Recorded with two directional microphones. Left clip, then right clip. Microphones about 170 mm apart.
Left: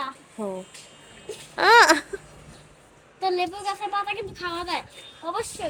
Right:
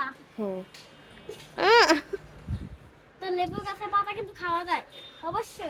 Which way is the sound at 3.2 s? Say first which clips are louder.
Left 5 dB; 10° right (ahead or behind).